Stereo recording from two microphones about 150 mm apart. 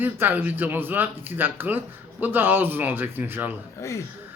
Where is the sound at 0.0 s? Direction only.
10° right (ahead or behind).